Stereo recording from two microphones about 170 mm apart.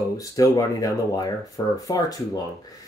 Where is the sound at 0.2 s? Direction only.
20° left (ahead or behind).